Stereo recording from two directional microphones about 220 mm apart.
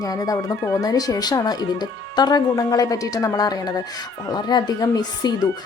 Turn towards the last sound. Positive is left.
turn(degrees=20)  # may be behind; listen again after turning